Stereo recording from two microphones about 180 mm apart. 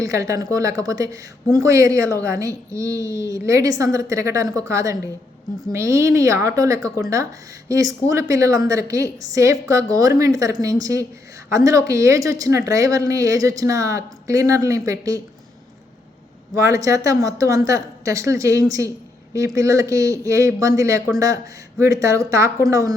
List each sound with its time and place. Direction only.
0.0 s a woman's voice: 15° right (ahead or behind)
16.6 s a woman's voice: 15° right (ahead or behind)